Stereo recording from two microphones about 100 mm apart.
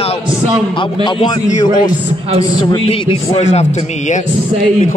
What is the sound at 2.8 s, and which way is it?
Speech, 70° left (ahead or behind).